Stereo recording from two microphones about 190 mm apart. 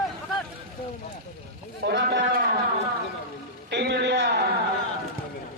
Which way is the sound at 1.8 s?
65° right (ahead or behind).